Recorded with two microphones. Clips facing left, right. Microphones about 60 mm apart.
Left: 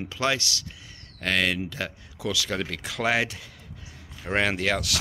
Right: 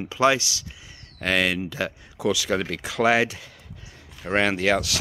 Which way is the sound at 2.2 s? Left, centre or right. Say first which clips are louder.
Right 5 dB; centre.